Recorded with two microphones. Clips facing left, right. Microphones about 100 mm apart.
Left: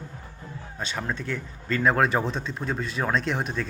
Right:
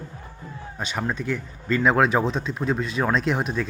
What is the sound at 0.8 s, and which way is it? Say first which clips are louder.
Speech: right 3 dB; 10° right (ahead or behind).